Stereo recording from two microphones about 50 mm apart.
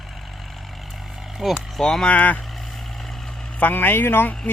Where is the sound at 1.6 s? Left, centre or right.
Centre.